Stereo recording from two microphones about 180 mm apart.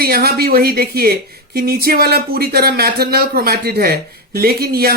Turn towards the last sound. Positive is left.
turn(degrees=-60)  # may be behind; listen again after turning